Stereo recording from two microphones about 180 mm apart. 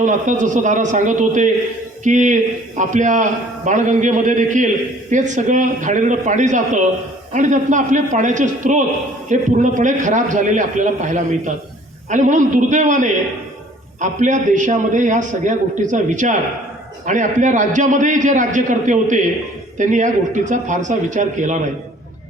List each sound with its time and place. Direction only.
0.0 s a man's voice: 45° right (ahead or behind)